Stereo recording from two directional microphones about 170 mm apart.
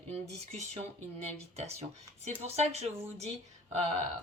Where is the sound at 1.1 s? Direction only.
40° right (ahead or behind).